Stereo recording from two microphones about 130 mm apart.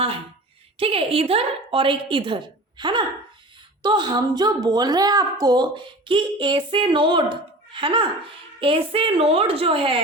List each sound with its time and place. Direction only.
0.8 s a woman's voice: 45° right (ahead or behind)